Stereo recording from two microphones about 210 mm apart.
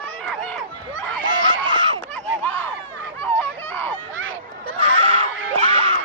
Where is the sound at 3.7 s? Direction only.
10° left (ahead or behind).